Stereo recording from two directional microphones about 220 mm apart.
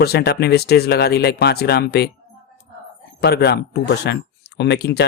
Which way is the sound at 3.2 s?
45° left (ahead or behind).